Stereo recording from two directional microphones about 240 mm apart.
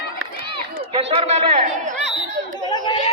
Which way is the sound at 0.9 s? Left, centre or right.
Right.